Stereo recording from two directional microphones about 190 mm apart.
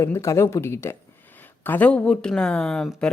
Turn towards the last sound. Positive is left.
turn(degrees=5)  # may be behind; listen again after turning